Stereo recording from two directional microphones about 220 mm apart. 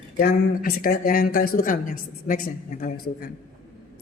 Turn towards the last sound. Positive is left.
turn(degrees=40)  # may be behind; listen again after turning